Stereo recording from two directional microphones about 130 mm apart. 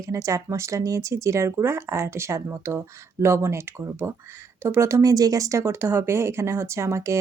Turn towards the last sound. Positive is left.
turn(degrees=-20)  # may be behind; listen again after turning